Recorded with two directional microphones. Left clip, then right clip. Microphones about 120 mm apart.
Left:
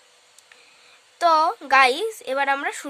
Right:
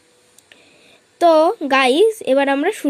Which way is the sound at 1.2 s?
20° right (ahead or behind).